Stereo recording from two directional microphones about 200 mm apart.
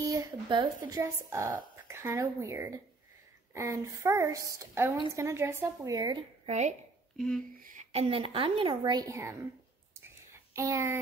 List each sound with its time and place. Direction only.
0.0 s speech: 15° right (ahead or behind); by 6.7 s 35° right (ahead or behind)
7.2 s speech: centre (ahead or behind)
7.6 s a woman's voice: 35° right (ahead or behind); by 9.4 s 15° right (ahead or behind)
9.9 s a sound: 15° right (ahead or behind)